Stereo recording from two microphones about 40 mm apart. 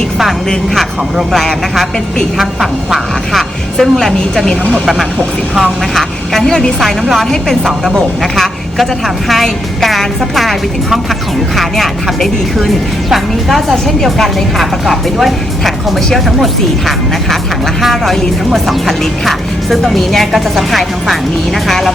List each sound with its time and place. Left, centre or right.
1.3 s speech: centre
3.8 s speech: centre
5.5 s a woman's voice: centre